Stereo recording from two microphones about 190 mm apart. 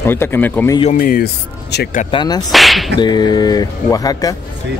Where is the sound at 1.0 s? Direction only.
50° left (ahead or behind).